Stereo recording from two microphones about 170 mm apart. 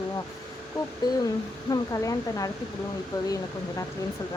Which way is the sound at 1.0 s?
25° left (ahead or behind).